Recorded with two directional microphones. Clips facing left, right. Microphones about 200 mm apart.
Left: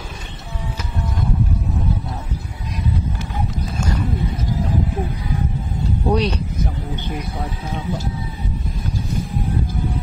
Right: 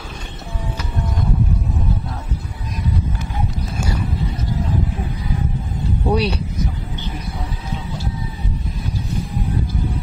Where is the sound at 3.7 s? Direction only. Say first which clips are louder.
Left 2 dB; 10° right (ahead or behind).